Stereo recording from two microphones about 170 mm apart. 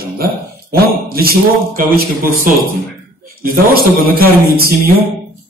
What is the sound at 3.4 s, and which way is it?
A man's voice, 60° right (ahead or behind).